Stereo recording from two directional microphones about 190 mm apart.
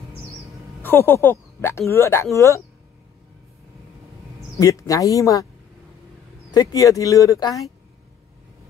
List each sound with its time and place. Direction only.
0.8 s speech: 10° left (ahead or behind)
4.4 s speech: 15° left (ahead or behind)
6.5 s speech: 20° left (ahead or behind)